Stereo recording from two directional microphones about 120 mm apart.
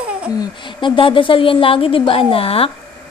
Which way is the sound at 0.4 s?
40° left (ahead or behind).